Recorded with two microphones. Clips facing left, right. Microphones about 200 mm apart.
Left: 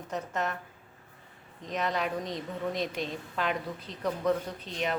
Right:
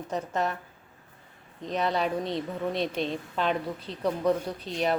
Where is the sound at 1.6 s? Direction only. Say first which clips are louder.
Right 4 dB; 35° right (ahead or behind).